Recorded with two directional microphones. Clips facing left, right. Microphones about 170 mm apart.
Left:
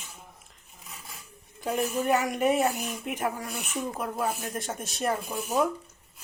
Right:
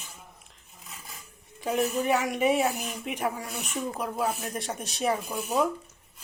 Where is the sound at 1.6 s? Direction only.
Centre (ahead or behind).